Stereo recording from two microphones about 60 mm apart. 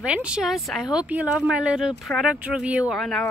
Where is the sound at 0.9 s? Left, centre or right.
Right.